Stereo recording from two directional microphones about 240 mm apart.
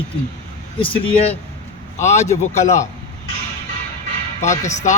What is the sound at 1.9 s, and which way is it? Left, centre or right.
Speech, left.